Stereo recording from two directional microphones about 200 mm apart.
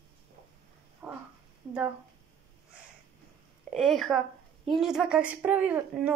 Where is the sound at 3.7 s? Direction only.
Centre (ahead or behind).